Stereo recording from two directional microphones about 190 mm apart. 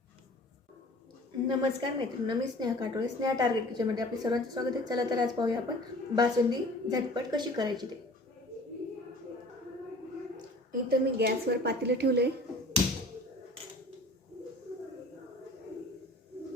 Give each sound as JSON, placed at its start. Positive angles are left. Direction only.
{"t": 1.5, "sound": "a woman's voice", "side_deg": -25}
{"t": 10.3, "sound": "a woman's voice", "side_deg": -50}